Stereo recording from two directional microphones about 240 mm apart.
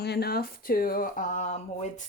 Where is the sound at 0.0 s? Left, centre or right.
Left.